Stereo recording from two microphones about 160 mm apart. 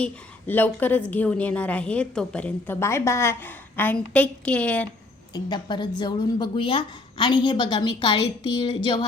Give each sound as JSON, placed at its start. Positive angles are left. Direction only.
{"t": 0.0, "sound": "a woman's voice", "side_deg": 10}
{"t": 5.3, "sound": "speech", "side_deg": 25}